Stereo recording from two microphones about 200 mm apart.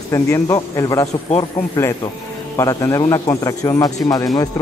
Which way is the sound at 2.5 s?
15° left (ahead or behind).